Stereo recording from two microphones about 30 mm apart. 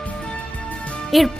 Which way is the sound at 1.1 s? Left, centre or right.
Centre.